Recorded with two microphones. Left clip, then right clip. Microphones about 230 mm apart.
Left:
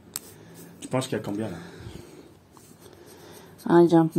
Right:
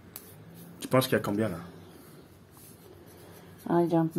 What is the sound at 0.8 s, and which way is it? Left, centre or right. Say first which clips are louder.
Speech: right 3 dB; centre.